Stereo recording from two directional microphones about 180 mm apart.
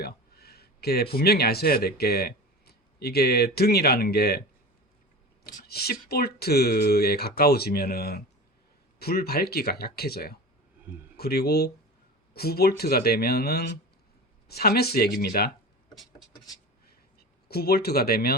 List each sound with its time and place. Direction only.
0.0 s a sound: 60° left (ahead or behind)
1.1 s speech: 60° left (ahead or behind)
5.5 s speech: 60° left (ahead or behind)
10.9 s speech: 10° right (ahead or behind)
11.2 s speech: 60° left (ahead or behind)
16.8 s a sound: 60° left (ahead or behind)